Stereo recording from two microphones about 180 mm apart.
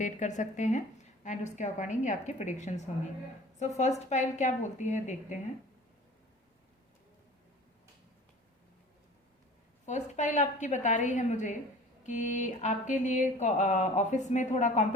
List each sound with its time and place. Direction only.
0.0 s mantra: 40° left (ahead or behind)
1.2 s a woman's voice: 40° left (ahead or behind)
9.8 s a woman's voice: 40° left (ahead or behind)
12.0 s mantra: 45° left (ahead or behind)
13.4 s a woman's voice: 40° left (ahead or behind)